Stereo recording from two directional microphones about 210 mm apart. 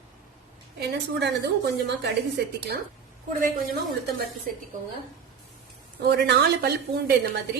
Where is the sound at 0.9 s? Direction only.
55° right (ahead or behind).